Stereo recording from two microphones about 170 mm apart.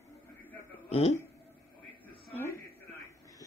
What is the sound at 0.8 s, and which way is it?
Speech, 40° left (ahead or behind).